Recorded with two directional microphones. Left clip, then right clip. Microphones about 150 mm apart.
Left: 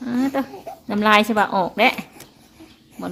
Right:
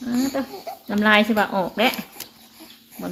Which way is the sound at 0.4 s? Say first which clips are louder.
Left 3 dB; 35° left (ahead or behind).